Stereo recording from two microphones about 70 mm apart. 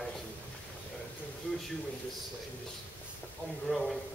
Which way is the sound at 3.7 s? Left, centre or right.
Centre.